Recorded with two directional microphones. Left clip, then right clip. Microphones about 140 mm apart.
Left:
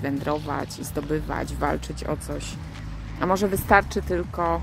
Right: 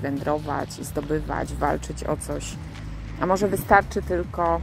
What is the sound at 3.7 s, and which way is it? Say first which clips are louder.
Speech: right 1 dB; 30° left (ahead or behind).